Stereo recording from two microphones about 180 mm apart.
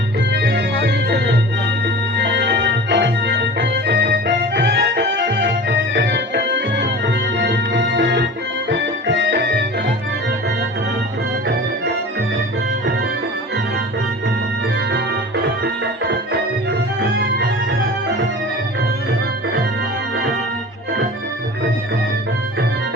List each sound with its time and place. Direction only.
0.3 s organ: 70° right (ahead or behind)
7.3 s music: 75° right (ahead or behind)